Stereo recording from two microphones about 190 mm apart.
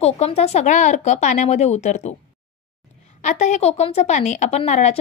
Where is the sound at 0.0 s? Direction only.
35° left (ahead or behind).